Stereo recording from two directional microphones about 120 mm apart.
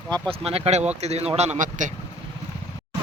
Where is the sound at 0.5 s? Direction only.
65° right (ahead or behind); by 1.9 s 90° right.